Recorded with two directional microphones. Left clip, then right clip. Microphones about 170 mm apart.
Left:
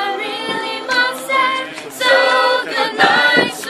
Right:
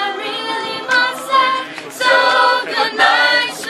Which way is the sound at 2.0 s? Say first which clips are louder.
Right 1 dB; 5° left (ahead or behind).